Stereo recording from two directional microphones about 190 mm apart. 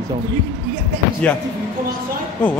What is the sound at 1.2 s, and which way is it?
Speech, 5° left (ahead or behind).